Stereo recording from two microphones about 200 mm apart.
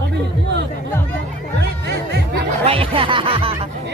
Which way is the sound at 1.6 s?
55° right (ahead or behind).